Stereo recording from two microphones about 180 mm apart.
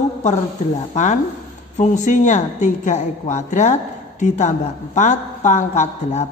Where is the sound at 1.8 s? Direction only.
40° left (ahead or behind).